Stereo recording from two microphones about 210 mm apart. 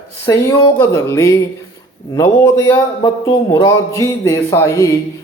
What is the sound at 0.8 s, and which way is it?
Speech, 10° left (ahead or behind).